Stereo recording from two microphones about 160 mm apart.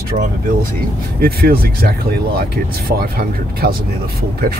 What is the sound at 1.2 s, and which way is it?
Speech, 70° right (ahead or behind).